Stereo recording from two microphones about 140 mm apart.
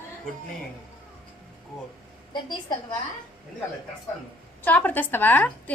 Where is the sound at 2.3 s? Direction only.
30° left (ahead or behind).